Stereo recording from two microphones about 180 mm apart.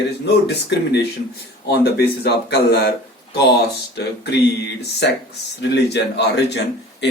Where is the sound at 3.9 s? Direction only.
70° left (ahead or behind).